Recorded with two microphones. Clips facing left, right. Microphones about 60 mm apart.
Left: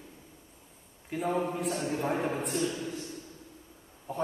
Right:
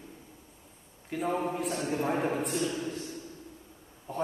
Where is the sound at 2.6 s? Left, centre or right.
Right.